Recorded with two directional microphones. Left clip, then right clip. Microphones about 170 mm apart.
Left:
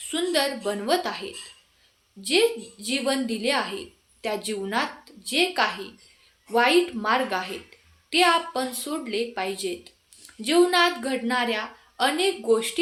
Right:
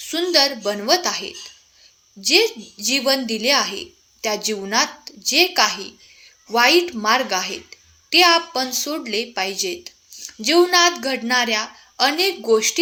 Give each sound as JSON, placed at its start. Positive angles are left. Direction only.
{"t": 0.1, "sound": "speech", "side_deg": -35}